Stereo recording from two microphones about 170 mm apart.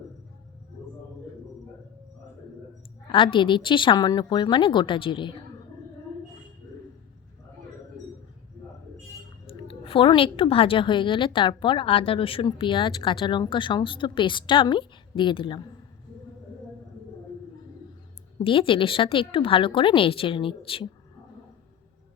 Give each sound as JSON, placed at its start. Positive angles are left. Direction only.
{"t": 3.1, "sound": "a woman's voice", "side_deg": 30}
{"t": 9.5, "sound": "a woman's voice", "side_deg": 30}
{"t": 18.3, "sound": "a woman's voice", "side_deg": 30}